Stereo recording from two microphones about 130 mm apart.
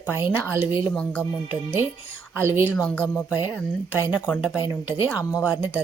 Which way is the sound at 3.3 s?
15° right (ahead or behind).